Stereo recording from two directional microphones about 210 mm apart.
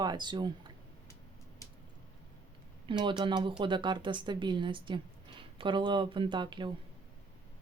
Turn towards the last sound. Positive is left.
turn(degrees=-20)  # may be behind; listen again after turning